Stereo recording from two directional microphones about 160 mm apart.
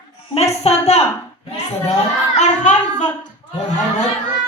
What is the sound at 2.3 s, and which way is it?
Speech, 45° left (ahead or behind).